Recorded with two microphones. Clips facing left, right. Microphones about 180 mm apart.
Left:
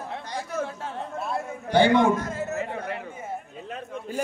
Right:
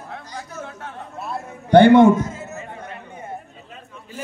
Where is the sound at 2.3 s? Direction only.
60° left (ahead or behind).